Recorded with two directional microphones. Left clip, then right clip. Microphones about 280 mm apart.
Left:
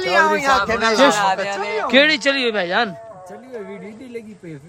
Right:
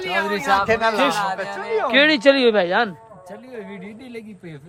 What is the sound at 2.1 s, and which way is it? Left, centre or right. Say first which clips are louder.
Speech: right 3 dB; centre.